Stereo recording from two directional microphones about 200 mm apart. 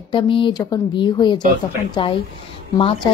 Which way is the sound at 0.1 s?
25° left (ahead or behind).